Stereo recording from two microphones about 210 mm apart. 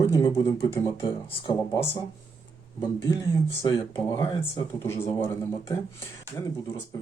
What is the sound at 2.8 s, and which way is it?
Speech, 20° left (ahead or behind).